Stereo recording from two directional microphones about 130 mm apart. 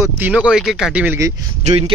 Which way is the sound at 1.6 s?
50° right (ahead or behind).